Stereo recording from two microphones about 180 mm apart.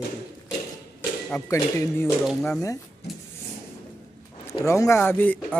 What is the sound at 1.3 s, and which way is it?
Speech, 15° left (ahead or behind).